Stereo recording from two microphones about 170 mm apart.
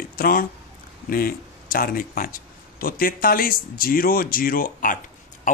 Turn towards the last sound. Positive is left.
turn(degrees=50)  # may be behind; listen again after turning